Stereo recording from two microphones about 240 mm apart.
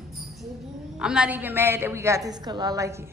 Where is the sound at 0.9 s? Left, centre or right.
Centre.